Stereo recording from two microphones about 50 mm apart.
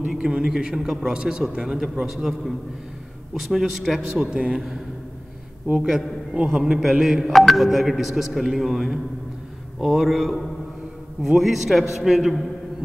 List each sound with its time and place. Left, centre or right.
0.1 s a man's voice: centre
3.3 s a man's voice: centre
5.7 s a man's voice: centre